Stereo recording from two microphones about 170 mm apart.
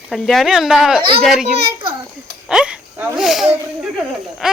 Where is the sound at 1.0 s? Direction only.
30° right (ahead or behind).